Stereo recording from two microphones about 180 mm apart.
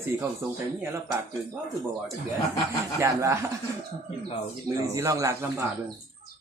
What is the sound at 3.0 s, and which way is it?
Speech, 15° right (ahead or behind).